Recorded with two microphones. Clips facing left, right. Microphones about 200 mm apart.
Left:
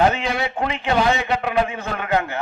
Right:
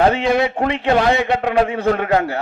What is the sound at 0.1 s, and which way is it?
Speech, 35° right (ahead or behind).